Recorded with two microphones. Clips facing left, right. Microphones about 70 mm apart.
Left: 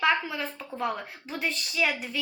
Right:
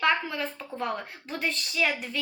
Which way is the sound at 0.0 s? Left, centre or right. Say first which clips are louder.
Even; centre.